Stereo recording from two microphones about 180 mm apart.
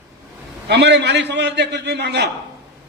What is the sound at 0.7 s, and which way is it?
A man's voice, 70° right (ahead or behind).